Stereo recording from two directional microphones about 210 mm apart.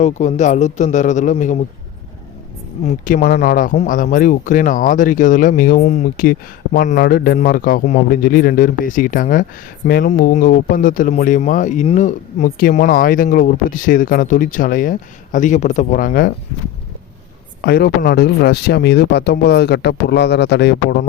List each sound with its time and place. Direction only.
0.0 s a man's voice: 35° left (ahead or behind)
2.8 s a man's voice: 40° left (ahead or behind)
17.6 s speech: 50° left (ahead or behind)